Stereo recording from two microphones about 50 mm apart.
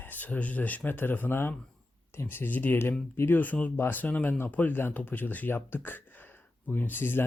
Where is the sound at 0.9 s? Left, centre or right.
Left.